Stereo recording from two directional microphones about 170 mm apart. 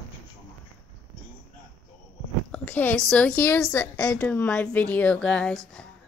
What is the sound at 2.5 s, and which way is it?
A woman's voice, 10° left (ahead or behind).